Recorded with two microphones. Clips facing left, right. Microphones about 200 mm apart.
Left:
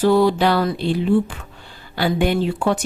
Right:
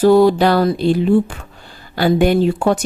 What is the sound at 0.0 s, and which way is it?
Speech, 45° right (ahead or behind).